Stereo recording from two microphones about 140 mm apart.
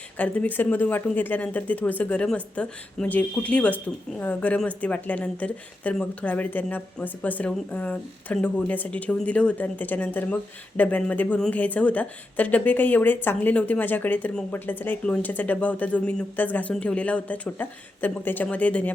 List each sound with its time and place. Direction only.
0.2 s speech: 10° left (ahead or behind)